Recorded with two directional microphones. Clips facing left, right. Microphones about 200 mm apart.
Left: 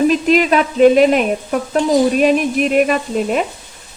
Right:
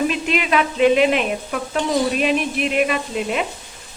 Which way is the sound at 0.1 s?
40° left (ahead or behind).